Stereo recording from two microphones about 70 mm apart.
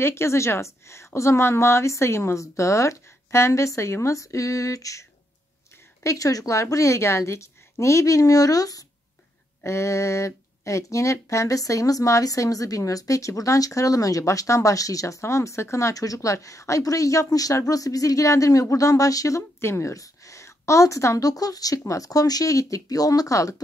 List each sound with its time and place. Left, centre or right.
0.0 s speech: left
6.0 s speech: left
9.6 s speech: left